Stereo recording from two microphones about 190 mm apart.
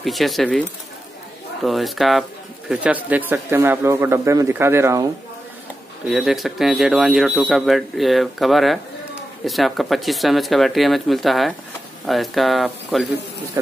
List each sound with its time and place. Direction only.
0.0 s speech: centre (ahead or behind)
6.0 s speech: centre (ahead or behind)